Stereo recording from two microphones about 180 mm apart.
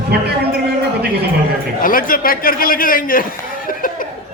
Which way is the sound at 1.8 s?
50° left (ahead or behind).